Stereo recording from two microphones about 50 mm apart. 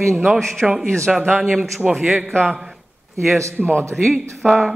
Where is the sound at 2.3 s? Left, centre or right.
Centre.